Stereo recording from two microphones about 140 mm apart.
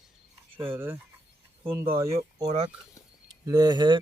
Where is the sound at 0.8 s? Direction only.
15° right (ahead or behind).